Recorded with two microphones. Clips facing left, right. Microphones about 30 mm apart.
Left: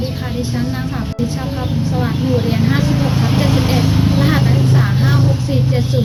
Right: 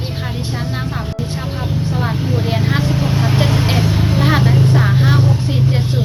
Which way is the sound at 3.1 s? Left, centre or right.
Right.